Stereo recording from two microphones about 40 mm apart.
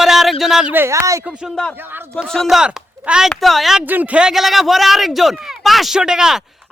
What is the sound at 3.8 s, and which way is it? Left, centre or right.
Speech, right.